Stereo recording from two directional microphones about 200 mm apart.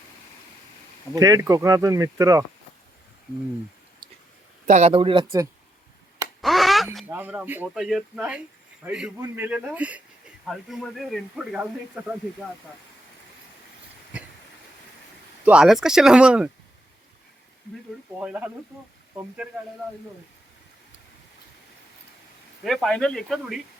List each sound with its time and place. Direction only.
1.1 s speech: 15° right (ahead or behind)
4.6 s a man's voice: 35° right (ahead or behind)
6.4 s a sound: centre (ahead or behind)
6.9 s speech: 5° right (ahead or behind)
15.4 s speech: 5° right (ahead or behind)
18.2 s speech: 5° right (ahead or behind)
22.6 s speech: centre (ahead or behind)